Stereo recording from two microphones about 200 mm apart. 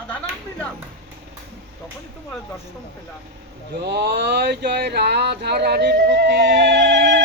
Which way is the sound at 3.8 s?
55° right (ahead or behind).